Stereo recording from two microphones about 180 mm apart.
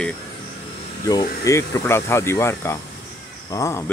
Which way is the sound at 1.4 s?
15° left (ahead or behind).